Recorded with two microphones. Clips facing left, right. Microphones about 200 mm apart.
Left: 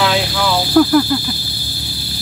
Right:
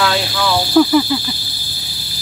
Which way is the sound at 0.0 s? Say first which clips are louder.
Left 1 dB; 15° left (ahead or behind).